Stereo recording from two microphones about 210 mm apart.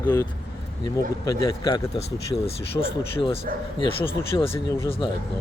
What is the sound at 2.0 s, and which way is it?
Speech, 30° left (ahead or behind).